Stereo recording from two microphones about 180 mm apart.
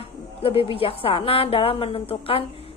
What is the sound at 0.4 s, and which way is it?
A woman's voice, 30° left (ahead or behind).